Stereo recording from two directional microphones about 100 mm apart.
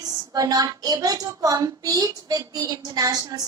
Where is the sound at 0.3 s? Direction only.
35° right (ahead or behind).